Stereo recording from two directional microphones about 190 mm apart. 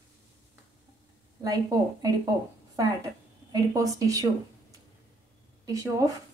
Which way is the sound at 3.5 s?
15° right (ahead or behind).